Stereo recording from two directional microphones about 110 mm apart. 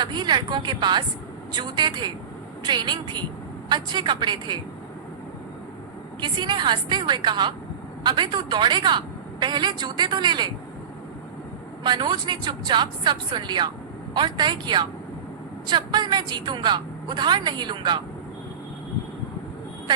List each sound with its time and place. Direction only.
0.0 s a woman's voice: 40° right (ahead or behind)
6.1 s a woman's voice: 40° right (ahead or behind)
11.8 s a woman's voice: 40° right (ahead or behind)